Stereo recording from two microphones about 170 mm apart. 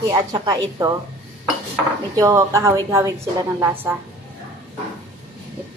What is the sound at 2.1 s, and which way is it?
A woman's voice, 20° right (ahead or behind).